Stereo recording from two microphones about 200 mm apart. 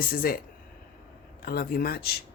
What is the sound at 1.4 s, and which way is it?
Speech, 45° left (ahead or behind).